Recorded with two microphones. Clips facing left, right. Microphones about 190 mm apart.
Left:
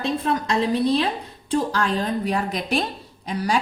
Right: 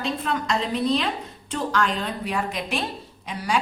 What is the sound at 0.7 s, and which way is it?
Speech, 35° left (ahead or behind).